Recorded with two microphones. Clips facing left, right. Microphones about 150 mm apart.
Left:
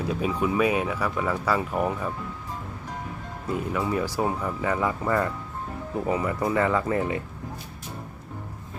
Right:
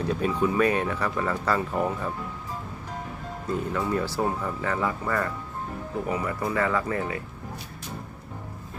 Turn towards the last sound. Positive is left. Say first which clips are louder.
# left 3 dB
turn(degrees=20)  # may be behind; listen again after turning